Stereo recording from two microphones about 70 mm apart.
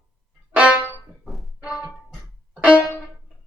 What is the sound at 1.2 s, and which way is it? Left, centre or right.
Music, centre.